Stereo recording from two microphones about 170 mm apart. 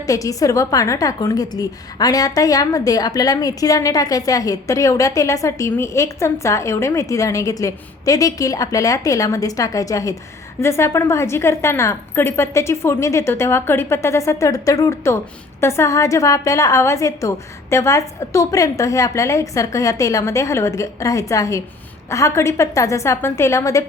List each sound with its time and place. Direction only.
0.0 s a woman's voice: 20° left (ahead or behind)